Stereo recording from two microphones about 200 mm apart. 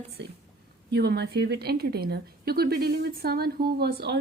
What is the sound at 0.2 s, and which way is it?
A woman's voice, 60° right (ahead or behind).